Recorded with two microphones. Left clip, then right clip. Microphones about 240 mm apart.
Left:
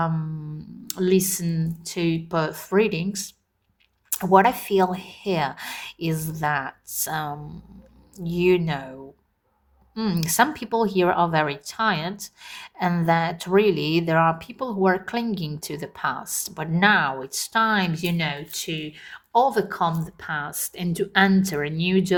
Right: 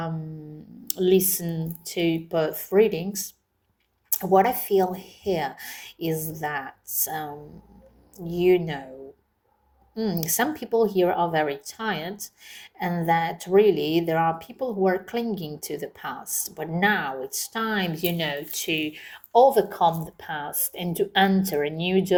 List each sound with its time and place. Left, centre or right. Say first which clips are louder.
0.9 s a woman's voice: right 1 dB; left
9.9 s a woman's voice: left 2 dB; left
20.2 s speech: left 3 dB; left
20.9 s speech: left 1 dB; left